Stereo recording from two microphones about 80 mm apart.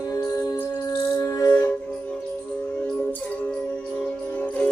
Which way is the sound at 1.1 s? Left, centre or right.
Left.